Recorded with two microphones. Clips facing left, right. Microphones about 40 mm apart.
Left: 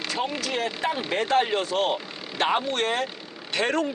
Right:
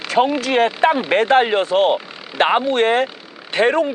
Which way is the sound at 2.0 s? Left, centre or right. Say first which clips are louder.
Right 3 dB; centre.